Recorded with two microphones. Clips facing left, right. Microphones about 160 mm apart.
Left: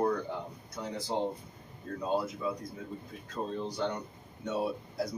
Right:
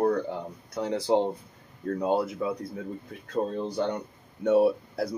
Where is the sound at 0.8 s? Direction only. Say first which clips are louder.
Right 9 dB; 80° right.